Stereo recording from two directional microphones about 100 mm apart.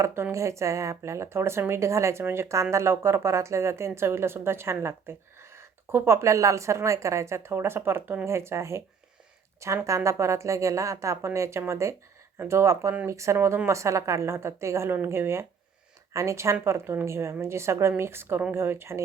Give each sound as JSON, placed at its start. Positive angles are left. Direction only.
{"t": 0.0, "sound": "a woman's voice", "side_deg": -30}